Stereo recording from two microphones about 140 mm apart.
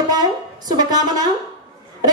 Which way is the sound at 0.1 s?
30° right (ahead or behind).